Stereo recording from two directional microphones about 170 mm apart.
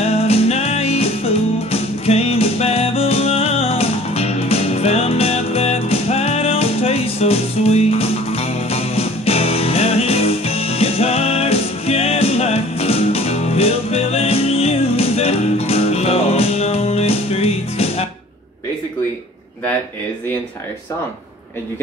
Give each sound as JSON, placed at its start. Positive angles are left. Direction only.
{"t": 0.0, "sound": "music", "side_deg": 35}